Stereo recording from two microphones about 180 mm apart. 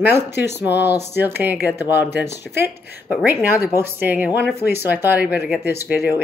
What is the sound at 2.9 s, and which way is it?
Speech, 10° right (ahead or behind).